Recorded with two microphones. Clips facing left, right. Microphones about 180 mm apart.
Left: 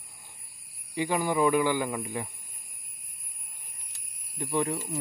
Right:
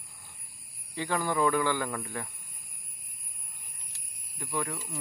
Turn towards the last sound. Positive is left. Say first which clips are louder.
# left 6 dB
turn(degrees=25)  # may be behind; listen again after turning